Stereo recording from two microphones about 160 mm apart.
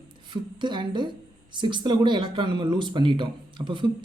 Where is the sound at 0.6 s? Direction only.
30° right (ahead or behind).